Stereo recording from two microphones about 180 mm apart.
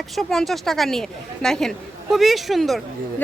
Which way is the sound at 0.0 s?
Centre (ahead or behind).